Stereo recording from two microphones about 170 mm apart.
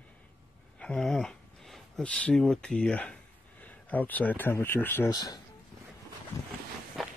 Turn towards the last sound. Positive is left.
turn(degrees=0)  # may be behind; listen again after turning